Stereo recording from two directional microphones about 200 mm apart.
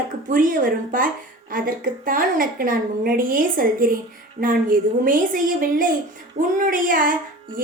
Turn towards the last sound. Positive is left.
turn(degrees=-45)  # may be behind; listen again after turning